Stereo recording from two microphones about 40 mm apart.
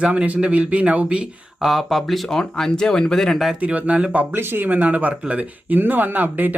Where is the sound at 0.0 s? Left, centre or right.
Right.